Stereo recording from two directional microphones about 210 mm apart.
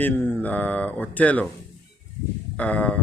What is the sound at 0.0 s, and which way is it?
Speech, 10° left (ahead or behind).